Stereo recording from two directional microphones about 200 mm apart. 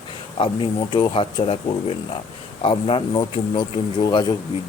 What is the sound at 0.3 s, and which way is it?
Speech, 25° left (ahead or behind).